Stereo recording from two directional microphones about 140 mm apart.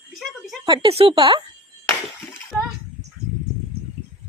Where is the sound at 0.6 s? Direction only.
35° right (ahead or behind).